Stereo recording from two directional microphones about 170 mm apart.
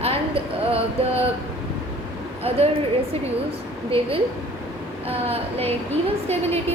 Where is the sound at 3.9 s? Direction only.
35° right (ahead or behind).